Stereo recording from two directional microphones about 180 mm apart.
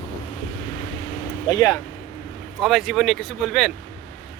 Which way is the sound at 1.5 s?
20° left (ahead or behind).